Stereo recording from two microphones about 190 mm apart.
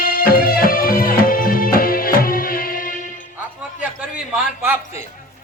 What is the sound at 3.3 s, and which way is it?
Music, 5° right (ahead or behind).